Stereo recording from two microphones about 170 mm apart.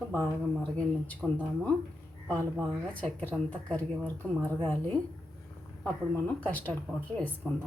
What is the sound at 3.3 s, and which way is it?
Speech, 5° right (ahead or behind).